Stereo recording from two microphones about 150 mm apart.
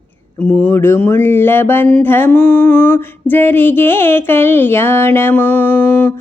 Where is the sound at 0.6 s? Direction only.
15° left (ahead or behind).